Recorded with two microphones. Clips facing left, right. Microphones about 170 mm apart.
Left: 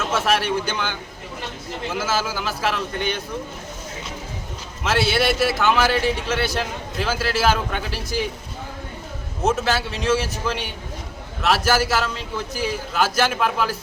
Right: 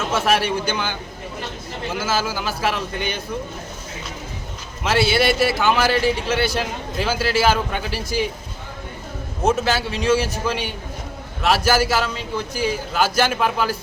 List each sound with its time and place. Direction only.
0.0 s a man's voice: centre (ahead or behind)
4.8 s a man's voice: centre (ahead or behind)
9.4 s a man's voice: centre (ahead or behind)